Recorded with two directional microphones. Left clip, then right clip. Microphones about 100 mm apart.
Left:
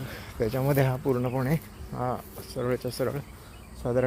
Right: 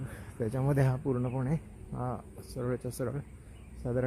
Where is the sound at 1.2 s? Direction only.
Centre (ahead or behind).